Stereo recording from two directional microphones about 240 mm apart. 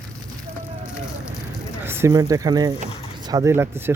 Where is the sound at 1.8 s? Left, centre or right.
Centre.